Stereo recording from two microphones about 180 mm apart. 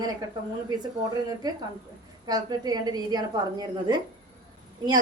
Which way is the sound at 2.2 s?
20° right (ahead or behind).